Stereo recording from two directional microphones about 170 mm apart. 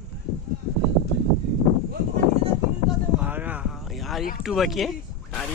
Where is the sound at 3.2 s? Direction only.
10° right (ahead or behind).